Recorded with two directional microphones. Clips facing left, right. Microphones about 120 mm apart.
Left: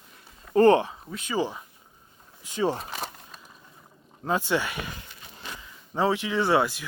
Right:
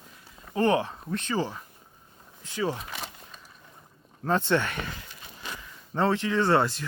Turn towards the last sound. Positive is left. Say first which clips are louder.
# even
turn(degrees=5)  # may be behind; listen again after turning